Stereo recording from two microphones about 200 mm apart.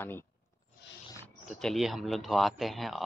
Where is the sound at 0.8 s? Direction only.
60° left (ahead or behind).